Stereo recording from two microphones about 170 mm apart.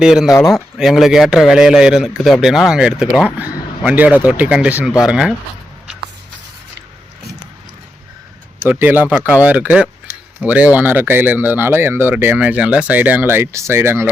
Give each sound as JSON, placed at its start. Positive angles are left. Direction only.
{"t": 0.0, "sound": "a man's voice", "side_deg": -5}
{"t": 0.3, "sound": "speech", "side_deg": 20}
{"t": 0.5, "sound": "a man's voice", "side_deg": 0}
{"t": 8.6, "sound": "speech", "side_deg": -10}